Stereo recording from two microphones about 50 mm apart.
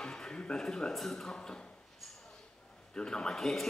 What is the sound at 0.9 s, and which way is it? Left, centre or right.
Speech, centre.